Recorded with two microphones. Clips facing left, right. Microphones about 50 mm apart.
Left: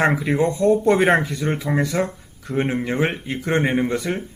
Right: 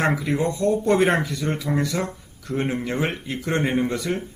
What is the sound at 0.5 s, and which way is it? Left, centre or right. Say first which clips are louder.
Speech: left 3 dB; left.